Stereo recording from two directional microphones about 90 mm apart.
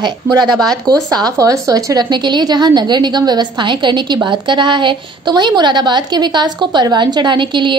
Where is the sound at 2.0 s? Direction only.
55° right (ahead or behind).